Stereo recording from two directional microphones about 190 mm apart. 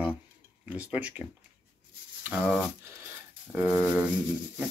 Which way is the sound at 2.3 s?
10° right (ahead or behind).